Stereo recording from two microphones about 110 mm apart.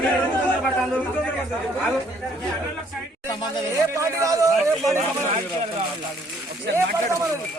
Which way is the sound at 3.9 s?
30° right (ahead or behind).